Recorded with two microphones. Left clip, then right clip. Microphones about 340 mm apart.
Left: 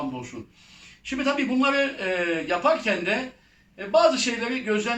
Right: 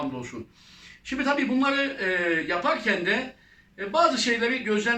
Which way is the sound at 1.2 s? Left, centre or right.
Centre.